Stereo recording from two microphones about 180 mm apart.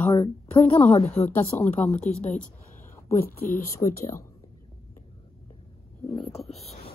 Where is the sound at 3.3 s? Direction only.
50° left (ahead or behind).